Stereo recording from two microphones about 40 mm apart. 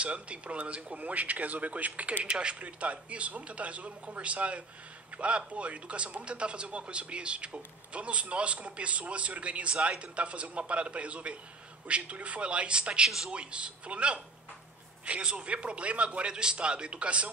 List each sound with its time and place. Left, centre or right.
0.0 s a man's voice: right